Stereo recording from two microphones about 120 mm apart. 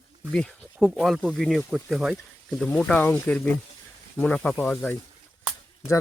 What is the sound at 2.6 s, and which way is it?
Speech, 10° left (ahead or behind).